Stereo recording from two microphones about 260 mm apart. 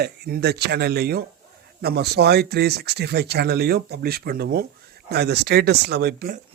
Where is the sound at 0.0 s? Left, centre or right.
Right.